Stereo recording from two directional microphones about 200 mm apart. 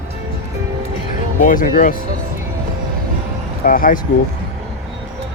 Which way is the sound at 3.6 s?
45° left (ahead or behind).